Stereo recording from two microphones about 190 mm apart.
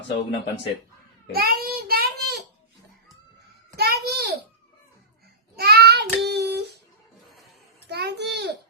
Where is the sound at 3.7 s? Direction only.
55° right (ahead or behind).